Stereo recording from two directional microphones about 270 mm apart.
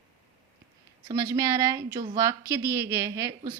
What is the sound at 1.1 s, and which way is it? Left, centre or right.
A woman's voice, centre.